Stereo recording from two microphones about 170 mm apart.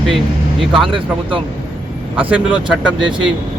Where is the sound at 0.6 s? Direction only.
Centre (ahead or behind).